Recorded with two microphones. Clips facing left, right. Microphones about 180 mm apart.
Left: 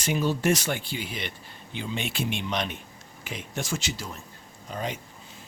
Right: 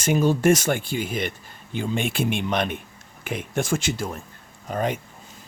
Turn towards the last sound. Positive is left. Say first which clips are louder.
# right 7 dB
turn(degrees=-55)  # may be behind; listen again after turning